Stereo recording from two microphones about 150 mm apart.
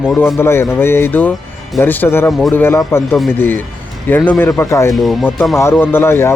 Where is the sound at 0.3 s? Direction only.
15° left (ahead or behind).